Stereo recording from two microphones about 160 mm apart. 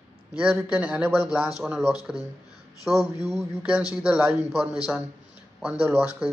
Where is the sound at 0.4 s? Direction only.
10° right (ahead or behind).